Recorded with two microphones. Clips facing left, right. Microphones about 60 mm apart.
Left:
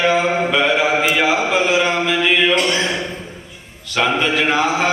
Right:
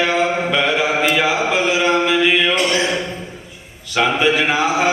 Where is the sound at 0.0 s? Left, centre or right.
Centre.